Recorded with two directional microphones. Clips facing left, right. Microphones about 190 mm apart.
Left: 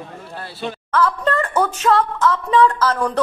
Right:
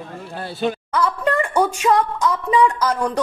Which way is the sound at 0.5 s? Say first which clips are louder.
Even; 10° right (ahead or behind).